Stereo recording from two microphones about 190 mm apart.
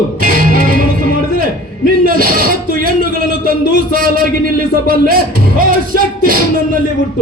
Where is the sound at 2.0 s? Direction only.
50° right (ahead or behind).